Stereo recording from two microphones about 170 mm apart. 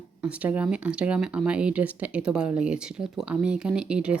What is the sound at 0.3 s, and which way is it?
Speech, 10° right (ahead or behind).